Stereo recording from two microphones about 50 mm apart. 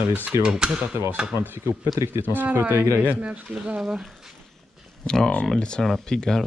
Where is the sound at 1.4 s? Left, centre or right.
Right.